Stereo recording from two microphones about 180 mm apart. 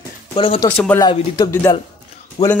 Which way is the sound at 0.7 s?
5° left (ahead or behind).